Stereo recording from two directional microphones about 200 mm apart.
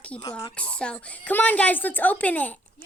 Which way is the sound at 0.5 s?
5° left (ahead or behind).